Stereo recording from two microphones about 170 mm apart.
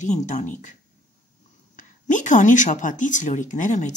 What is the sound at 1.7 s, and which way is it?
Speech, 45° left (ahead or behind).